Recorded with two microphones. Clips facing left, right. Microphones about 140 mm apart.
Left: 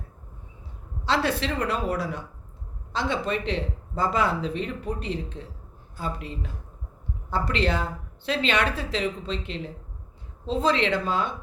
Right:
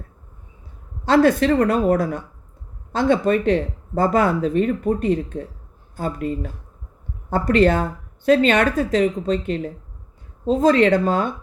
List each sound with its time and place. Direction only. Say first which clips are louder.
1.0 s speech: right 10 dB; 50° right (ahead or behind)